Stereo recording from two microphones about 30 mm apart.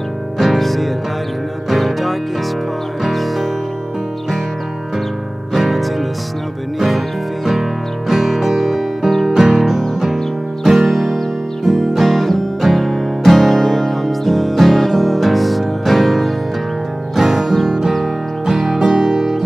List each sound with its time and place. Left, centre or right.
0.4 s music: centre
5.5 s music: centre
8.1 s music: centre
10.7 s music: centre
17.6 s music: centre